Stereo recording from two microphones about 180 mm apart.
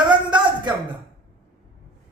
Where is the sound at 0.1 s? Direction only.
25° right (ahead or behind).